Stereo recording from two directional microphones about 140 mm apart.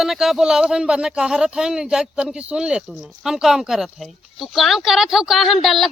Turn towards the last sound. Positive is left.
turn(degrees=0)  # may be behind; listen again after turning